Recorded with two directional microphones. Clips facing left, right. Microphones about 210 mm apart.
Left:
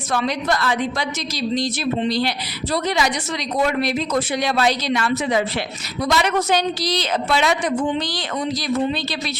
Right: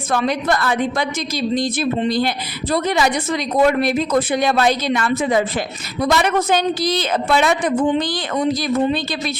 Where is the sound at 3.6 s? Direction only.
50° right (ahead or behind).